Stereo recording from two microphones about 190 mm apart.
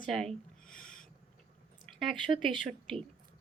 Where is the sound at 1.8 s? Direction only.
Centre (ahead or behind).